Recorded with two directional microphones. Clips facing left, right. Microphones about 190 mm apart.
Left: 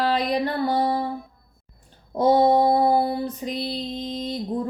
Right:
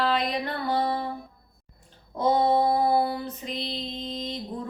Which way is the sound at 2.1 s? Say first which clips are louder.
Left 5 dB; 35° left (ahead or behind).